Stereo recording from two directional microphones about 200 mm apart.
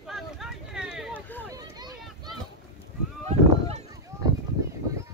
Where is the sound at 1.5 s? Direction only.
20° right (ahead or behind).